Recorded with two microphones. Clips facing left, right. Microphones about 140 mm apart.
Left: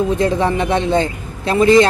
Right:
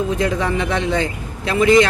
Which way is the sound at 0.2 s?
30° left (ahead or behind).